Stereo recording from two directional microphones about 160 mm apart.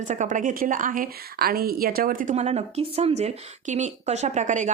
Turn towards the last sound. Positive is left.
turn(degrees=-50)  # may be behind; listen again after turning